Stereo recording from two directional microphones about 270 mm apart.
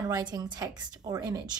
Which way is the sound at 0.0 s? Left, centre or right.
Centre.